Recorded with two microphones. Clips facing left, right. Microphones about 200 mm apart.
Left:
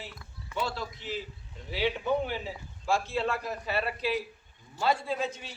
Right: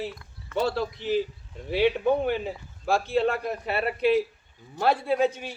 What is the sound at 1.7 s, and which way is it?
A man's voice, 55° right (ahead or behind).